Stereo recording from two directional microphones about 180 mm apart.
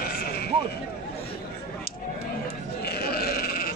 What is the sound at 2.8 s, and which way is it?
Sheep, 60° left (ahead or behind).